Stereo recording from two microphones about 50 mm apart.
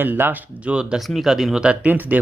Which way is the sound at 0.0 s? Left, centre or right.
Right.